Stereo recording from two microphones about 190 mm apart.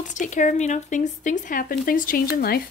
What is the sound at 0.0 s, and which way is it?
Speech, 40° left (ahead or behind).